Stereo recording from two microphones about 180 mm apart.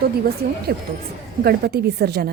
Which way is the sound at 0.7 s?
65° right (ahead or behind).